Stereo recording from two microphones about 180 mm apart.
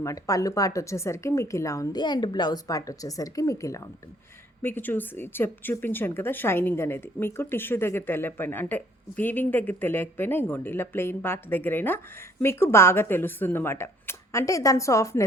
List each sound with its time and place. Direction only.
0.0 s speech: 20° left (ahead or behind)